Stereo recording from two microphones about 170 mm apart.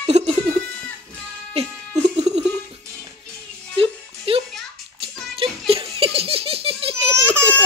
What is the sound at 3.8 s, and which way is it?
Music, 35° right (ahead or behind).